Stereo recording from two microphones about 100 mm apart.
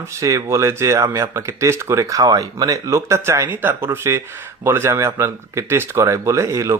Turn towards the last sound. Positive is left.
turn(degrees=-30)  # may be behind; listen again after turning